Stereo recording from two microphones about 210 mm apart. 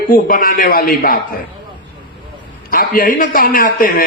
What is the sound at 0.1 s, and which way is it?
A man's voice, 40° left (ahead or behind).